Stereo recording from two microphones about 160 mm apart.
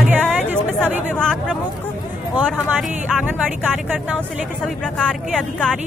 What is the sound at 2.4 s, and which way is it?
Speech, centre (ahead or behind).